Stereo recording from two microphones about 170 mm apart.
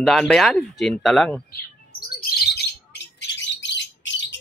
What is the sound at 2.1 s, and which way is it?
Bird, 65° left (ahead or behind).